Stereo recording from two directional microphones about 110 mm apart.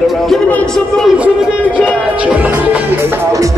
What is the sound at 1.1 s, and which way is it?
Speech, 10° right (ahead or behind).